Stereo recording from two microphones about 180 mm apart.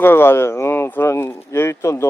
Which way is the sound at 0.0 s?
15° left (ahead or behind).